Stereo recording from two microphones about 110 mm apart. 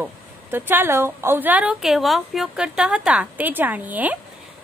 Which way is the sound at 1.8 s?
Centre (ahead or behind).